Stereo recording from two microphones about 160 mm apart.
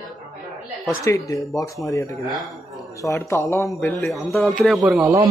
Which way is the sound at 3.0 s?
20° left (ahead or behind).